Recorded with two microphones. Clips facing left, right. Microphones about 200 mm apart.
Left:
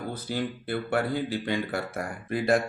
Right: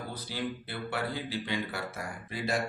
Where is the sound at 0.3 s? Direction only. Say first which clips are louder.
Left 6 dB; 50° left (ahead or behind).